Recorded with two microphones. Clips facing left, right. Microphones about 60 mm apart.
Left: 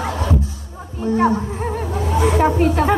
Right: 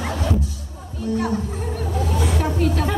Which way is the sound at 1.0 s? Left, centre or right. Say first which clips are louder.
Left 6 dB; left.